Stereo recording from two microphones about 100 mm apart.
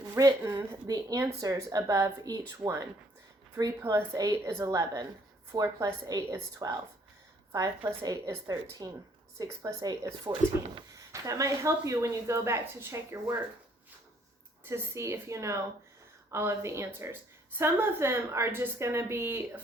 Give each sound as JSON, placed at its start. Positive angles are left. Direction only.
{"t": 0.1, "sound": "a woman's voice", "side_deg": -35}
{"t": 8.0, "sound": "a woman's voice", "side_deg": -35}
{"t": 14.6, "sound": "a woman's voice", "side_deg": -30}